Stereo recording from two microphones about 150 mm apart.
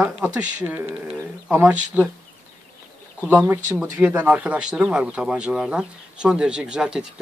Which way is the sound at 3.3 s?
10° right (ahead or behind).